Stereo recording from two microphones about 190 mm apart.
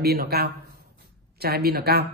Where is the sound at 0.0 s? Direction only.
55° right (ahead or behind).